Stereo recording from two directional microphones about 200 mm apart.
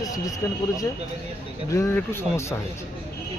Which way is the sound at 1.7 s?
10° left (ahead or behind).